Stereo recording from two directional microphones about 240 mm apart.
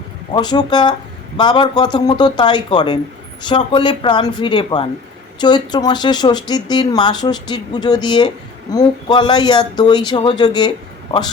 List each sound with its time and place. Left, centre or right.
0.3 s speech: centre